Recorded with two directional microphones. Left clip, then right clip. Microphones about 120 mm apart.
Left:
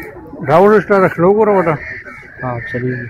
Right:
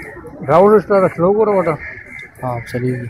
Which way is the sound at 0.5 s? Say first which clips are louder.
Left 1 dB; 60° left (ahead or behind).